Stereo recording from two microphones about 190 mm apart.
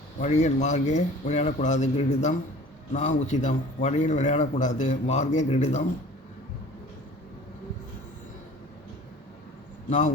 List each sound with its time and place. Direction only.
0.2 s speech: 35° left (ahead or behind)